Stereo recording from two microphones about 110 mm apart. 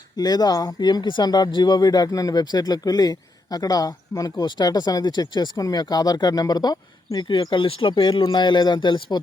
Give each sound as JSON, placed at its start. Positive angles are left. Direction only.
{"t": 0.2, "sound": "speech", "side_deg": 35}